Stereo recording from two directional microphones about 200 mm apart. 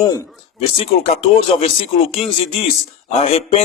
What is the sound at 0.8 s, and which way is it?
A man's voice, 30° left (ahead or behind).